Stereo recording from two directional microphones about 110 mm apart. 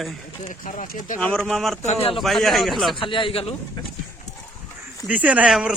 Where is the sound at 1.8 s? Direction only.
90° left.